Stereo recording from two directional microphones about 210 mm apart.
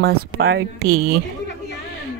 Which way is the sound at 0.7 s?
90° right.